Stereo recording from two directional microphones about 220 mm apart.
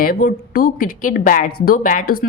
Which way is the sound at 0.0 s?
40° left (ahead or behind).